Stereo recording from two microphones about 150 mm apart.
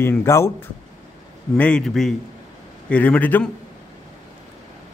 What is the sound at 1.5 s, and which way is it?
A man's voice, 5° left (ahead or behind).